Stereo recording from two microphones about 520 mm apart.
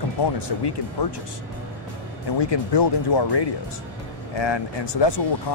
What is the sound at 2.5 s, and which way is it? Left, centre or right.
Speech, left.